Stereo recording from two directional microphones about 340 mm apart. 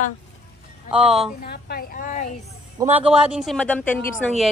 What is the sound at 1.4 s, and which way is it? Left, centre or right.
Speech, left.